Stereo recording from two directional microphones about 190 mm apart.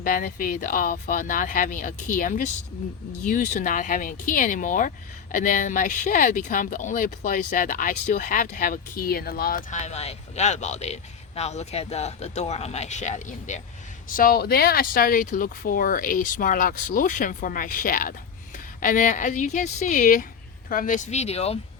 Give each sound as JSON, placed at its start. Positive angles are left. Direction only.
{"t": 0.0, "sound": "speech", "side_deg": 45}